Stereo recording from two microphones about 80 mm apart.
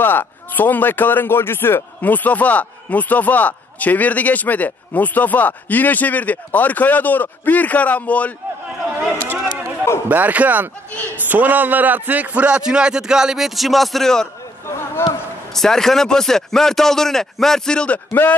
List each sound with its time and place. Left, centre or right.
0.0 s speech: left
10.0 s a man's voice: right; by 14.3 s centre
15.0 s a sound: left
15.5 s speech: centre